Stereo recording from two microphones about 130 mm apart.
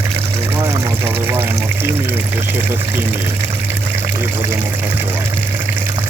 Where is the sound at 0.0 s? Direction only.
20° right (ahead or behind).